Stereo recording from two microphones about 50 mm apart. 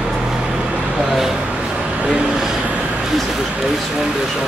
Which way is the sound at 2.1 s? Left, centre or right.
Centre.